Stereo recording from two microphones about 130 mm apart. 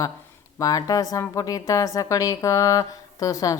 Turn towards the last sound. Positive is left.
turn(degrees=25)  # may be behind; listen again after turning